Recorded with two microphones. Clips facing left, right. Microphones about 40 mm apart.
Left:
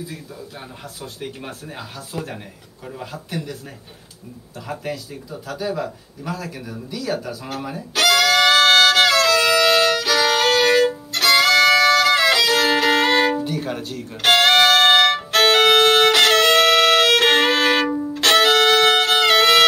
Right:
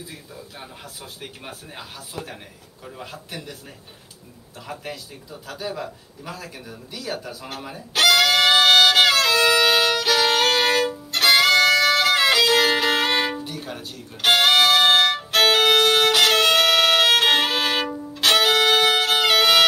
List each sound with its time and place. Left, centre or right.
1.2 s speech: centre
2.1 s speech: centre
2.9 s speech: centre
5.3 s speech: centre
6.9 s speech: centre
7.2 s music: centre
11.1 s violin: centre
13.4 s music: centre
15.0 s violin: centre
16.1 s violin: centre
17.8 s violin: centre
18.1 s violin: centre